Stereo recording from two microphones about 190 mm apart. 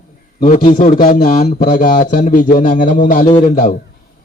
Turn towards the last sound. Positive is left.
turn(degrees=45)  # may be behind; listen again after turning